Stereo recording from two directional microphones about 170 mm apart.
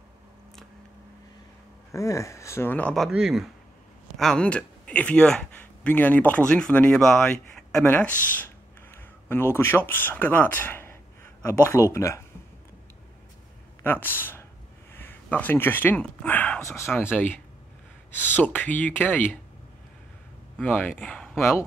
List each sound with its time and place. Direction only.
1.9 s speech: 20° left (ahead or behind)
13.8 s speech: 10° left (ahead or behind)
20.5 s speech: 10° left (ahead or behind)